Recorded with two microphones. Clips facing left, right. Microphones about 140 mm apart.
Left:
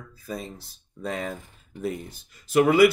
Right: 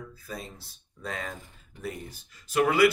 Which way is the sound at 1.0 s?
15° left (ahead or behind).